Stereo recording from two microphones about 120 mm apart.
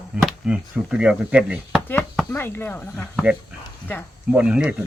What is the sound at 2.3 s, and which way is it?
Speech, 20° left (ahead or behind).